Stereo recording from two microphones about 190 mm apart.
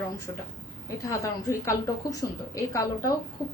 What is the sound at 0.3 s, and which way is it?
A woman's voice, 20° left (ahead or behind).